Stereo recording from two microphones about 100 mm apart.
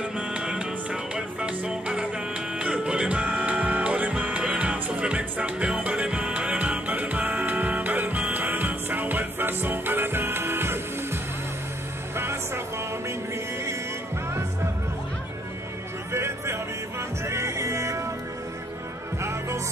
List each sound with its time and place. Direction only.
0.0 s music: 10° right (ahead or behind)
12.2 s music: 25° right (ahead or behind)
16.1 s music: 25° right (ahead or behind)